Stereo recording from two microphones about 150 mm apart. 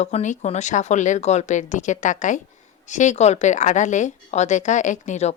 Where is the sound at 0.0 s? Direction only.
50° left (ahead or behind).